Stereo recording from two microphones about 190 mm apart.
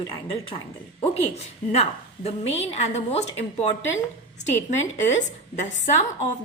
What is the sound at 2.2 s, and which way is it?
A woman's voice, 35° left (ahead or behind).